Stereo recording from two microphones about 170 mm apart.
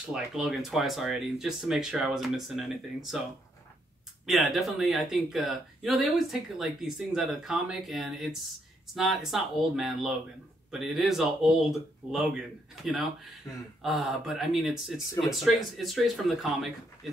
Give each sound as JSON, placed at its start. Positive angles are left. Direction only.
{"t": 0.1, "sound": "speech", "side_deg": -5}
{"t": 13.5, "sound": "a sound", "side_deg": 20}
{"t": 13.8, "sound": "speech", "side_deg": 0}